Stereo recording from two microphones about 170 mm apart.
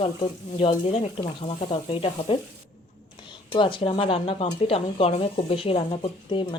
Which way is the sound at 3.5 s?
30° left (ahead or behind).